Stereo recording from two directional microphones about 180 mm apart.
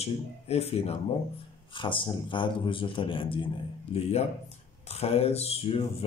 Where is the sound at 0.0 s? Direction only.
35° left (ahead or behind).